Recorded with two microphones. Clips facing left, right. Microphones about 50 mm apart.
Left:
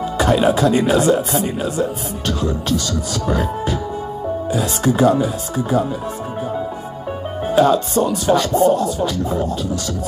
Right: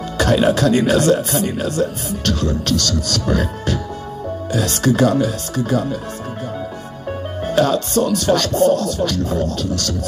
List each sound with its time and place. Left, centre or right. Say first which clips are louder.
0.2 s speech: even; centre
7.5 s speech: left 2 dB; centre